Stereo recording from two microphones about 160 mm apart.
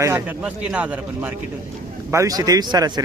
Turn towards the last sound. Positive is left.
turn(degrees=-25)  # may be behind; listen again after turning